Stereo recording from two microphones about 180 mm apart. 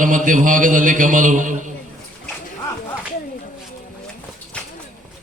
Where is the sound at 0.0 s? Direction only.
45° right (ahead or behind).